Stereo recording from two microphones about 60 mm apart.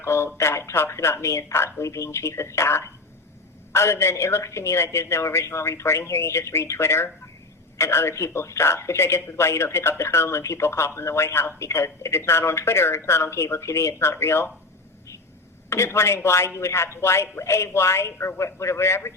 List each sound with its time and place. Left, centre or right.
0.0 s speech: left
15.7 s speech: left